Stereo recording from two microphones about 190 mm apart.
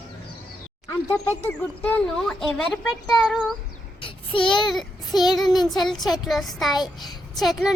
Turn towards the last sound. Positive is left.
turn(degrees=0)  # may be behind; listen again after turning